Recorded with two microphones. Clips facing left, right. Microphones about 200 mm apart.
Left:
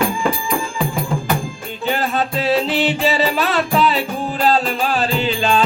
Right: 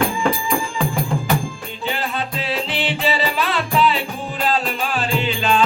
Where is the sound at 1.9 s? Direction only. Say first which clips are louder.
Left 5 dB; 45° left (ahead or behind).